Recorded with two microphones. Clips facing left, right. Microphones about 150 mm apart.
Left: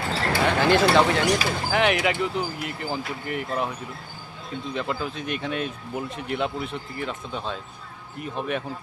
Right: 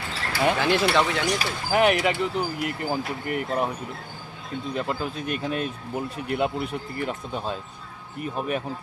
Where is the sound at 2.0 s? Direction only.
Centre (ahead or behind).